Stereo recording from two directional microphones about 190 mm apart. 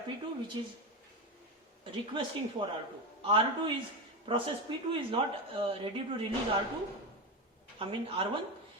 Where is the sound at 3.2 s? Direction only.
30° right (ahead or behind).